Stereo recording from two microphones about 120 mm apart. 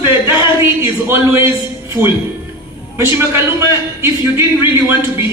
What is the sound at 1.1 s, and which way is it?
Speech, 20° right (ahead or behind).